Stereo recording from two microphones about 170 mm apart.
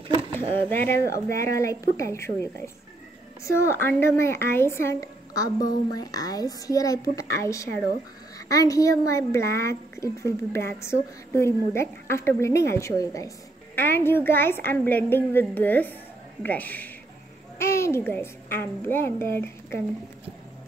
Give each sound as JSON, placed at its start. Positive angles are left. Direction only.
{"t": 0.6, "sound": "speech", "side_deg": 15}